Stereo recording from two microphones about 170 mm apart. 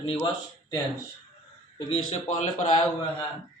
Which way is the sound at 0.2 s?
20° left (ahead or behind).